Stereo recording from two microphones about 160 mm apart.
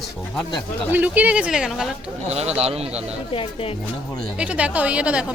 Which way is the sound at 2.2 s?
40° right (ahead or behind).